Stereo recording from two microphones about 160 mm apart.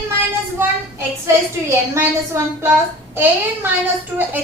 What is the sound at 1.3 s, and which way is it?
A woman's voice, 15° right (ahead or behind).